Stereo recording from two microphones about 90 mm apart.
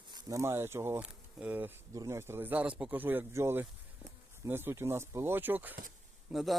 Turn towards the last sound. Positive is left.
turn(degrees=-5)  # may be behind; listen again after turning